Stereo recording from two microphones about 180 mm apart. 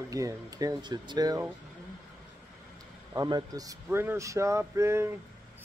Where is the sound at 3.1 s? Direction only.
20° right (ahead or behind).